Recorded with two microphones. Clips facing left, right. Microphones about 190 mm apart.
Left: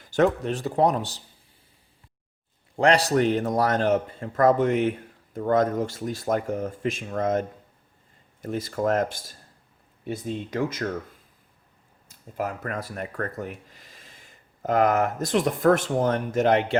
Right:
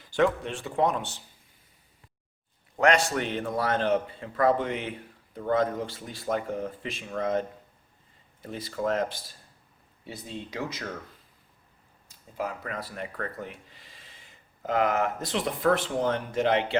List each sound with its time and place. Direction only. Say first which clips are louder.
0.0 s speech: left 3 dB; 45° left (ahead or behind)
2.7 s a man's voice: left 4 dB; 35° left (ahead or behind); by 10.8 s 50° left (ahead or behind)
12.4 s a man's voice: left 3 dB; 50° left (ahead or behind)